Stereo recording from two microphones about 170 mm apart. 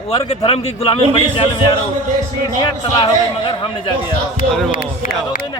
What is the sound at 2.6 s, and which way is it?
Speech, 25° left (ahead or behind).